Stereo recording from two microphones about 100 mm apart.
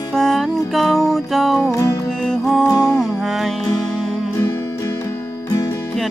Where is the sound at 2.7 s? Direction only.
35° left (ahead or behind).